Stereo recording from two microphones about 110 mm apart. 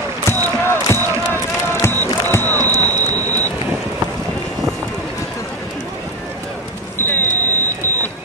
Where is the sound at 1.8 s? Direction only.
20° left (ahead or behind).